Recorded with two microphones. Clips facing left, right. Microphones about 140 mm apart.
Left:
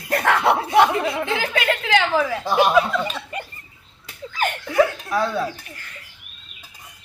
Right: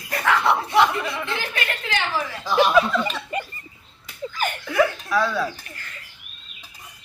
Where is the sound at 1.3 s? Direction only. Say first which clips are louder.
Left 6 dB; 90° left.